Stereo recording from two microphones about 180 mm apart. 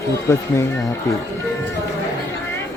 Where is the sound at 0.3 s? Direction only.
15° left (ahead or behind).